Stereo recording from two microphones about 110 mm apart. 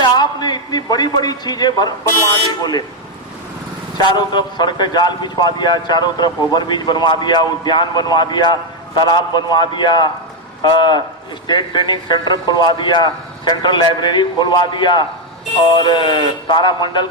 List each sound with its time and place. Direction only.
0.0 s a man's voice: 40° left (ahead or behind)
3.9 s a man's voice: 40° left (ahead or behind)